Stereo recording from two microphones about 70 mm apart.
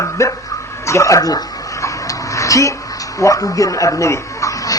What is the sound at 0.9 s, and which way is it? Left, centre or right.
Dog, left.